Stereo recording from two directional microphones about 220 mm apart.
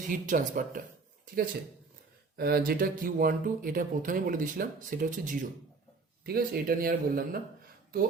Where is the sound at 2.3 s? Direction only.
45° right (ahead or behind).